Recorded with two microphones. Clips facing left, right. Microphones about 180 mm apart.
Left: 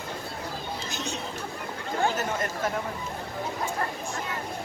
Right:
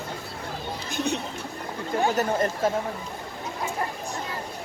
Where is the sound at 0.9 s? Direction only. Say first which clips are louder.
Right 10 dB; 60° right (ahead or behind).